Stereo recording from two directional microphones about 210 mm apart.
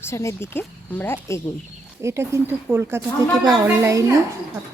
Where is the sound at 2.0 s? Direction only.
15° right (ahead or behind).